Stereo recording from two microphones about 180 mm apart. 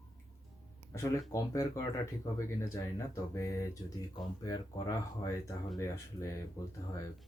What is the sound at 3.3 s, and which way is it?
Speech, 20° left (ahead or behind).